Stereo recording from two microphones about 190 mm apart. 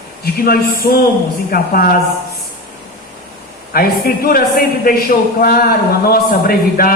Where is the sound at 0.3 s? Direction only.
50° left (ahead or behind).